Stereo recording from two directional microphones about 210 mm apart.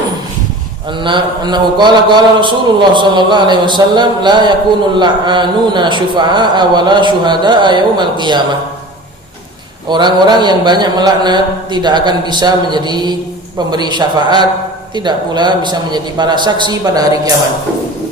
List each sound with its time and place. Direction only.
0.9 s a man's voice: 20° right (ahead or behind)
9.9 s a man's voice: 20° right (ahead or behind)